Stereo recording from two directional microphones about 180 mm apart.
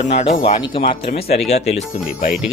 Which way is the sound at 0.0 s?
40° left (ahead or behind).